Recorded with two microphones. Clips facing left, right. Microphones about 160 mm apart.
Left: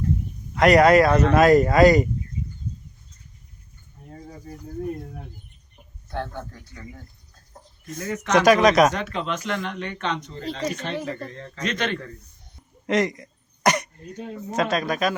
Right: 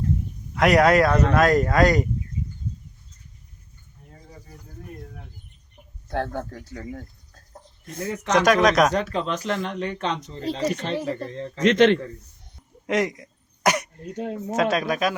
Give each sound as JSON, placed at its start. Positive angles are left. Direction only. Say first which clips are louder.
{"t": 0.5, "sound": "speech", "louder": "left 2 dB", "side_deg": 0}
{"t": 6.1, "sound": "speech", "louder": "right 4 dB", "side_deg": -40}
{"t": 7.9, "sound": "speech", "louder": "even", "side_deg": -30}
{"t": 8.3, "sound": "speech", "louder": "left 2 dB", "side_deg": 0}
{"t": 8.9, "sound": "speech", "louder": "right 3 dB", "side_deg": -35}
{"t": 11.6, "sound": "a man's voice", "louder": "right 10 dB", "side_deg": -90}
{"t": 12.9, "sound": "throat clearing", "louder": "left 1 dB", "side_deg": -5}
{"t": 14.5, "sound": "speech", "louder": "right 1 dB", "side_deg": -5}